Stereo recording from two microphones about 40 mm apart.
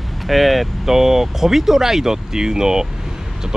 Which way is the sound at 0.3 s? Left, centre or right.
Centre.